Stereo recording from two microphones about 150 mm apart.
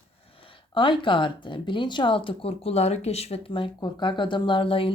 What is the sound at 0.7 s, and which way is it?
Speech, 30° left (ahead or behind).